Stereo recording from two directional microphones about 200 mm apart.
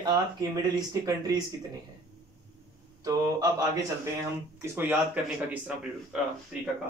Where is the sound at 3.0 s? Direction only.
20° right (ahead or behind).